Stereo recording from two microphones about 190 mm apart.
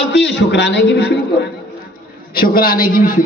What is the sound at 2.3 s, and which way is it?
Speech, 50° left (ahead or behind).